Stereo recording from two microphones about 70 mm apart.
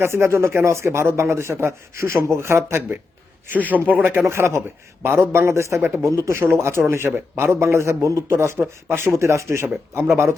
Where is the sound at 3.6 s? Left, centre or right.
Right.